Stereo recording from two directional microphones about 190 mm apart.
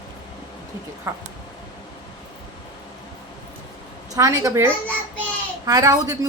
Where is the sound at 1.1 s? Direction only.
15° right (ahead or behind).